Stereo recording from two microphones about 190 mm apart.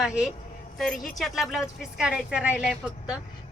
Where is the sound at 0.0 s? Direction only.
5° right (ahead or behind).